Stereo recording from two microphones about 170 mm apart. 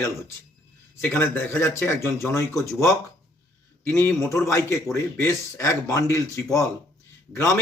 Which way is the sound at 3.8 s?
15° left (ahead or behind).